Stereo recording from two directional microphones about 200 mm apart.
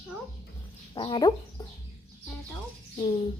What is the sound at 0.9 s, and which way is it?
Speech, 25° left (ahead or behind).